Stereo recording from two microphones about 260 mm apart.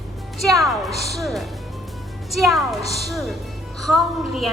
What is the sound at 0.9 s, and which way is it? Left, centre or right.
Speech, left.